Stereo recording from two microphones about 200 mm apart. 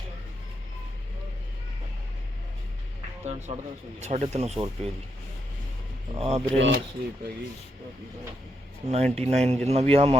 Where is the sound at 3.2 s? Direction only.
35° right (ahead or behind).